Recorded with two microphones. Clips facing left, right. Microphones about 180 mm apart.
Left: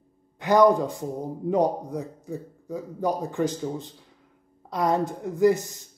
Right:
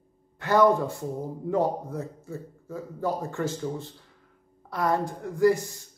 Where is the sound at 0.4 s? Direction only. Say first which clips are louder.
Left 2 dB; 15° left (ahead or behind).